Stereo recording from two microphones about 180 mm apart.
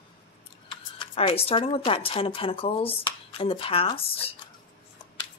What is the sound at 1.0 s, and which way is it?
Speech, 30° left (ahead or behind).